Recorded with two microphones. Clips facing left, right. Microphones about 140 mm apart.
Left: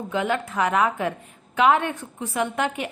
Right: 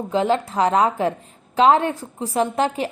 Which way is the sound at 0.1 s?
30° right (ahead or behind).